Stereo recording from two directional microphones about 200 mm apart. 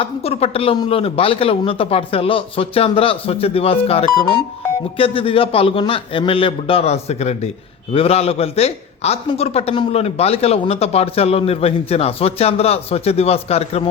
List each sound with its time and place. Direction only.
0.0 s a man's voice: 30° left (ahead or behind)